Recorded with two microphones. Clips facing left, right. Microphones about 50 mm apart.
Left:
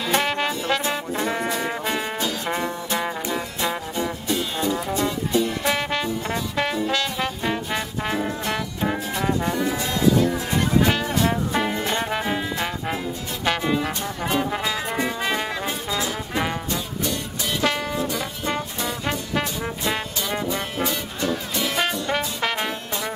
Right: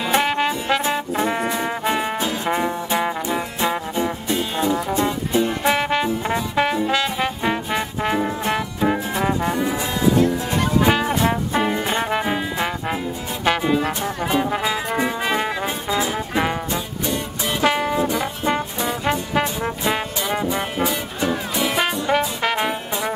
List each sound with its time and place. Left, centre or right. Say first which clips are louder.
0.0 s music: right 3 dB; centre